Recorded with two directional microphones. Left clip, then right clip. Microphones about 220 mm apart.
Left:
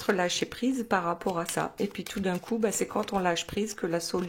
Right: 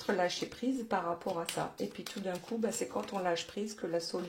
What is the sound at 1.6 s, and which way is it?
Speech, 35° left (ahead or behind).